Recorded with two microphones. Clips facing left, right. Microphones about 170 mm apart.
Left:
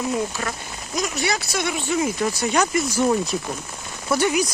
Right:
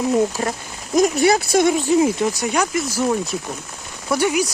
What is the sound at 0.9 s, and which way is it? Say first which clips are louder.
Speech: right 10 dB; 50° right (ahead or behind).